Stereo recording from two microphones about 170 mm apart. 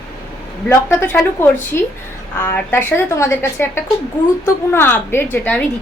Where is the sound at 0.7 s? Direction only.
10° left (ahead or behind).